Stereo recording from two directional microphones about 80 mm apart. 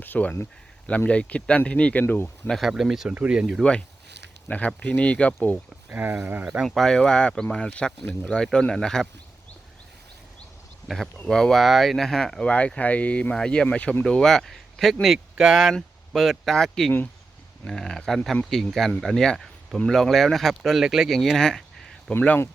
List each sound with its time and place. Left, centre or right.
0.0 s speech: left
2.5 s speech: centre
3.6 s speech: centre
5.9 s speech: right
6.7 s speech: centre
10.8 s speech: centre